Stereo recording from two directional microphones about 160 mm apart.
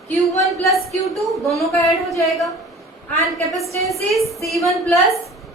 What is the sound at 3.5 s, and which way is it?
A woman's voice, centre (ahead or behind).